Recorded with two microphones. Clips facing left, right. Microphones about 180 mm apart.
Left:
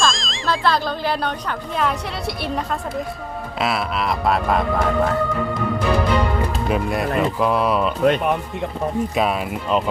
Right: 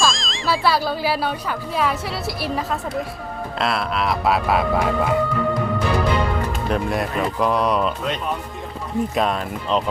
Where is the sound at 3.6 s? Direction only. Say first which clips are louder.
Even; centre (ahead or behind).